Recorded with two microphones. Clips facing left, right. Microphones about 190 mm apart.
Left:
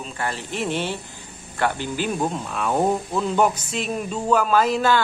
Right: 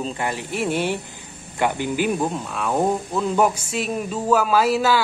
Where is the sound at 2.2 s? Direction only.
Centre (ahead or behind).